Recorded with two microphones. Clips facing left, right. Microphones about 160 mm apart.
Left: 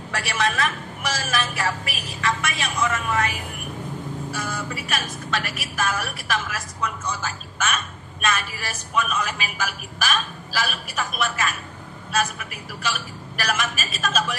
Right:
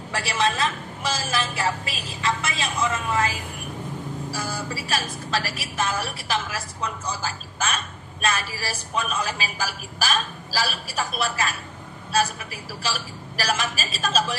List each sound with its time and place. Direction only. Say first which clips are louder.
0.1 s a woman's voice: right 1 dB; 30° right (ahead or behind)